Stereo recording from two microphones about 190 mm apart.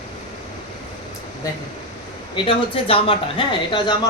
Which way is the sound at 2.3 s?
25° left (ahead or behind).